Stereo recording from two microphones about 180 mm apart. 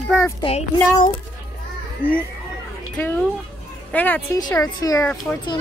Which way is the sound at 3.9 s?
10° left (ahead or behind).